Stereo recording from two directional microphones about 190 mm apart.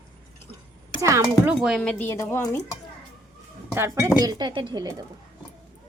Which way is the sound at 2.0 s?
15° left (ahead or behind).